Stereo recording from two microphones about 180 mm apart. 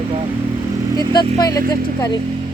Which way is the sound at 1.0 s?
20° left (ahead or behind).